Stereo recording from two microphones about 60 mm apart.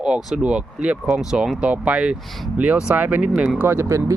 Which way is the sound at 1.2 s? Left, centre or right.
Centre.